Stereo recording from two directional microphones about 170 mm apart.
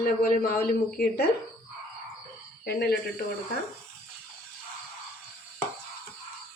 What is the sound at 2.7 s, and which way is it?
Speech, 70° left (ahead or behind).